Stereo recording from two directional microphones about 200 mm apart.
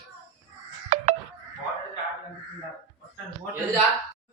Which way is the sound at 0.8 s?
35° right (ahead or behind).